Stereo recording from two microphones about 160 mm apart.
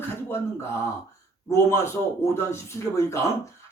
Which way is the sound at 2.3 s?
15° left (ahead or behind).